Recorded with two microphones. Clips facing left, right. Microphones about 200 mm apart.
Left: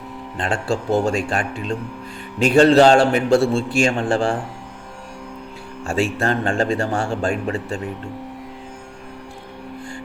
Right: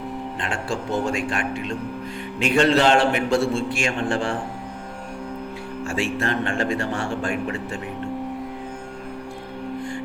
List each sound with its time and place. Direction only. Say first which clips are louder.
0.3 s a man's voice: left 8 dB; 35° left (ahead or behind)
5.9 s a man's voice: left 4 dB; 35° left (ahead or behind)